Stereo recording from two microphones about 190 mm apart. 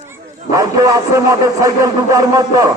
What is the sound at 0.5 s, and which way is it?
A man's voice, 20° right (ahead or behind).